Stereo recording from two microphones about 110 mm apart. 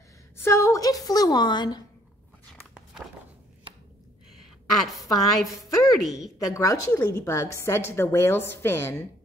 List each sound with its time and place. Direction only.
0.4 s a woman's voice: 25° left (ahead or behind); by 1.8 s 40° left (ahead or behind)
4.7 s a woman's voice: centre (ahead or behind)
6.4 s a woman's voice: 30° left (ahead or behind)